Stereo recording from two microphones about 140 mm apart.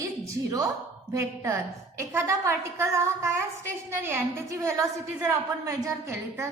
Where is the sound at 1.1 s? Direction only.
20° right (ahead or behind).